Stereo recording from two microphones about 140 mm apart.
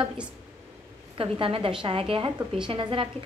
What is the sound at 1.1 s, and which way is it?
A woman's voice, 40° right (ahead or behind).